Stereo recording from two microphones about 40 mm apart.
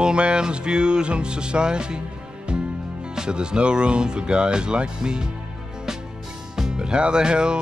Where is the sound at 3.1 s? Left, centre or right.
Right.